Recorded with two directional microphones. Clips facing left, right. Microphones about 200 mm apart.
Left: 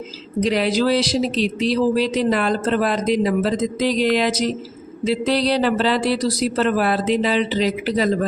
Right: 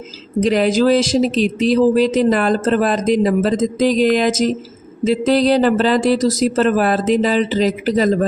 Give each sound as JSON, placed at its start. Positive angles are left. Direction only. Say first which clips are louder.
{"t": 0.3, "sound": "speech", "louder": "right 4 dB", "side_deg": -45}